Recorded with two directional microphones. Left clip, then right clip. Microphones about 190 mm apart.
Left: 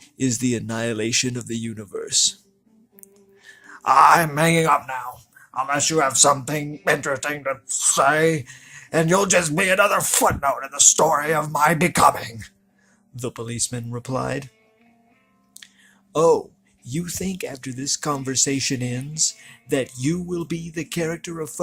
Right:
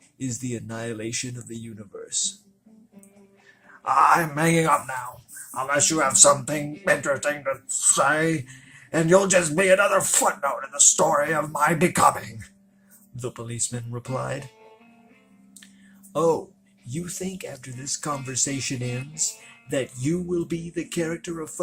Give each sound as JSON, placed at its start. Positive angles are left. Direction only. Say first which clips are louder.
{"t": 0.2, "sound": "speech", "louder": "left 9 dB", "side_deg": 50}
{"t": 3.7, "sound": "speech", "louder": "left 5 dB", "side_deg": 50}
{"t": 4.9, "sound": "speech", "louder": "left 2 dB", "side_deg": 40}
{"t": 16.1, "sound": "speech", "louder": "left 5 dB", "side_deg": 45}